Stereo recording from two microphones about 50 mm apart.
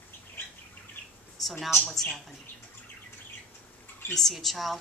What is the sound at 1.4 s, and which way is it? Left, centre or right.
Speech, centre.